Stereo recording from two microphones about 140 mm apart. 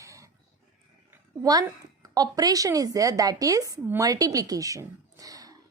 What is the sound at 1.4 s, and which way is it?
A woman's voice, 25° right (ahead or behind).